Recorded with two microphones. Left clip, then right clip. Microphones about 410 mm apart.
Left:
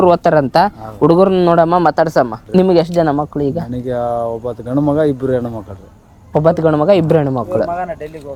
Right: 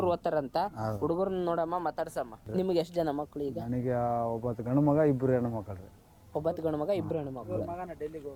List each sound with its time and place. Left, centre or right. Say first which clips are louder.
0.0 s a man's voice: left 19 dB; centre; by 2.4 s left
2.5 s a man's voice: left 15 dB; centre
3.8 s speech: left 12 dB; right
6.3 s a man's voice: left 19 dB; left